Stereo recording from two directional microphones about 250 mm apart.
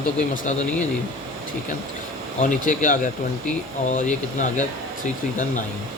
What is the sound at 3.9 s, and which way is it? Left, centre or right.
Speech, left.